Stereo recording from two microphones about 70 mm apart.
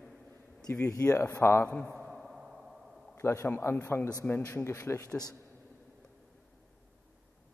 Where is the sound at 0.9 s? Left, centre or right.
Left.